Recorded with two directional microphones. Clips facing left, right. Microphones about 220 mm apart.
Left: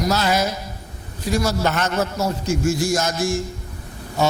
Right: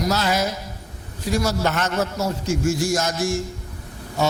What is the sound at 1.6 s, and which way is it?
Speech, 20° left (ahead or behind).